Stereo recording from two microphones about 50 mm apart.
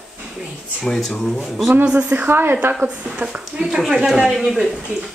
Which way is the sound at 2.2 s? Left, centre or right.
Right.